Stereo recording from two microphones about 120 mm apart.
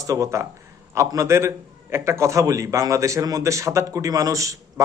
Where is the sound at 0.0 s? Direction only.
25° right (ahead or behind).